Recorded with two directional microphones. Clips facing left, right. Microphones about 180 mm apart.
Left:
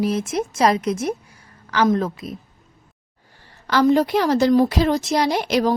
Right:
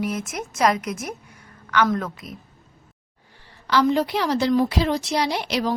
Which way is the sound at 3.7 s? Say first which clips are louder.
Left 4 dB; 45° left (ahead or behind).